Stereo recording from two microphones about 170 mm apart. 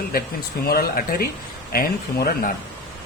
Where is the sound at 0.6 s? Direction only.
65° left (ahead or behind).